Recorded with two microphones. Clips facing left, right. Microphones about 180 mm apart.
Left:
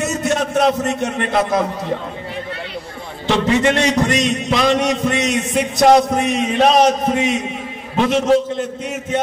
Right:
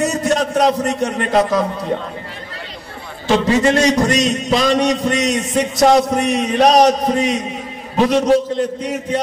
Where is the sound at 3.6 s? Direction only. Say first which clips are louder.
Right 2 dB; 40° right (ahead or behind).